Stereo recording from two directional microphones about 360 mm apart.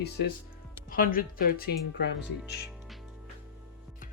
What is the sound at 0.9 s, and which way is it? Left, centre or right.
A woman's voice, left.